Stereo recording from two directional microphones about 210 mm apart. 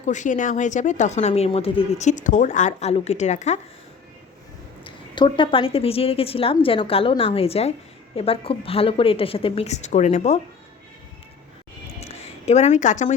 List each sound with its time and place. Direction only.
0.0 s speech: 35° left (ahead or behind)
4.8 s a woman's voice: 20° left (ahead or behind)
11.9 s a sound: 30° left (ahead or behind)